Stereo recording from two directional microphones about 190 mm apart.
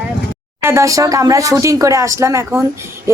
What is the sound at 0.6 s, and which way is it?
Speech, 15° right (ahead or behind).